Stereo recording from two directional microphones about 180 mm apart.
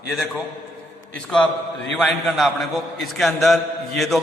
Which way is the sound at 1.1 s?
5° left (ahead or behind).